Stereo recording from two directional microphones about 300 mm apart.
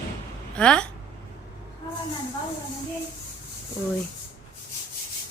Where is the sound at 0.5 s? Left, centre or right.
Centre.